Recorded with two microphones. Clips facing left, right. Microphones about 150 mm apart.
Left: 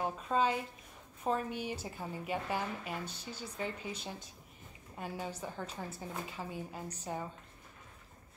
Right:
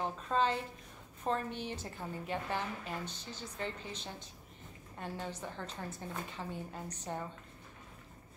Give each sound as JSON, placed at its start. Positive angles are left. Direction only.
{"t": 0.0, "sound": "a woman's voice", "side_deg": 10}